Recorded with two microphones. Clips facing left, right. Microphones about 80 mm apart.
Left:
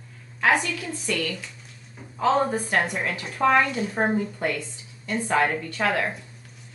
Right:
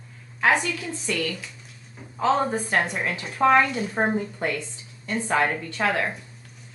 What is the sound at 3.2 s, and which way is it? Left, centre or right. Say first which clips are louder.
Speech: right 2 dB; centre.